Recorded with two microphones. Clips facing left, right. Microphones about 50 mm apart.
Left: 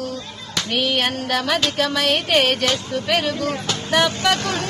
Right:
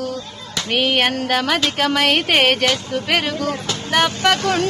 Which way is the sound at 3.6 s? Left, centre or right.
Centre.